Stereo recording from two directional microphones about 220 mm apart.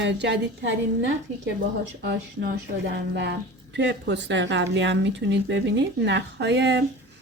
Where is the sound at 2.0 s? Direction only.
45° right (ahead or behind).